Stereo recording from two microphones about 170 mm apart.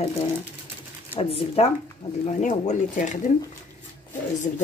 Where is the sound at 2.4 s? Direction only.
45° left (ahead or behind).